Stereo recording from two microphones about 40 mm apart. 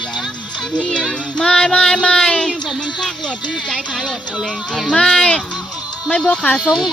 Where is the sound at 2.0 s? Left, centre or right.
Left.